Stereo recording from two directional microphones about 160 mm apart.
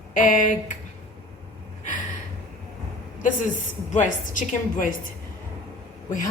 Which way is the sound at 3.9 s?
50° left (ahead or behind).